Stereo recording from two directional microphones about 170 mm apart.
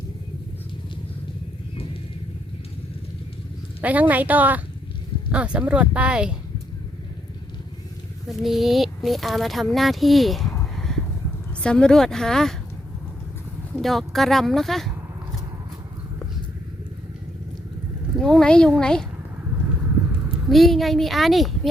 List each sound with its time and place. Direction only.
1.7 s vehicle: 35° left (ahead or behind)
3.8 s speech: 10° right (ahead or behind)
8.3 s speech: centre (ahead or behind)
10.6 s a sound: centre (ahead or behind)
11.6 s speech: 5° left (ahead or behind)
13.7 s speech: centre (ahead or behind)
18.2 s speech: centre (ahead or behind)
20.2 s a child's voice: centre (ahead or behind)